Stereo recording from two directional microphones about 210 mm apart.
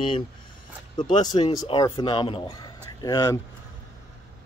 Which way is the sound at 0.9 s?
20° left (ahead or behind).